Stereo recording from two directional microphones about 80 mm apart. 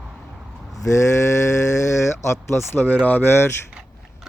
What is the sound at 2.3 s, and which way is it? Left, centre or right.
Speech, left.